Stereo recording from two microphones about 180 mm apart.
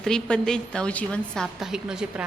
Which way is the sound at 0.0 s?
5° left (ahead or behind).